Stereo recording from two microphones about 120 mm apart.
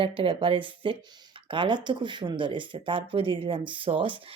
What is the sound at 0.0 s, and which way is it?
Speech, 50° right (ahead or behind).